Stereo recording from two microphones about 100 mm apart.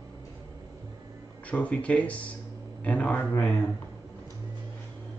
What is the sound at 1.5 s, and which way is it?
Speech, 10° left (ahead or behind).